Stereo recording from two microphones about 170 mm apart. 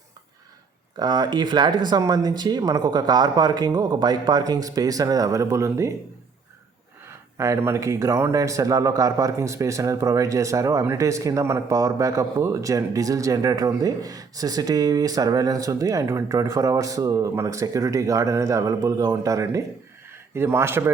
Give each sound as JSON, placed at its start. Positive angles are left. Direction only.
{"t": 0.9, "sound": "a man's voice", "side_deg": -25}
{"t": 7.3, "sound": "a man's voice", "side_deg": -15}